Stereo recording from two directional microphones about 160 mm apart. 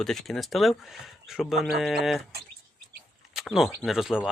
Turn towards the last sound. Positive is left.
turn(degrees=-5)  # may be behind; listen again after turning